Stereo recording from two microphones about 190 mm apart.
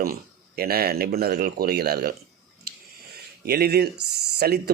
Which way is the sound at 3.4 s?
55° right (ahead or behind).